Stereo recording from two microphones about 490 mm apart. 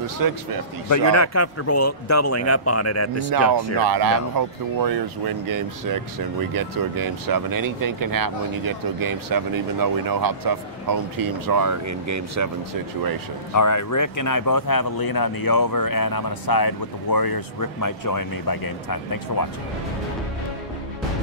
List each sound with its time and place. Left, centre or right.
0.0 s speech: right
0.8 s speech: left
3.8 s speech: right
13.5 s speech: left